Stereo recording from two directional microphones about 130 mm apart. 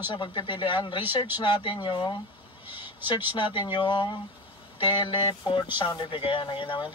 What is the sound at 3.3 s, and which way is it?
A man's voice, 40° left (ahead or behind).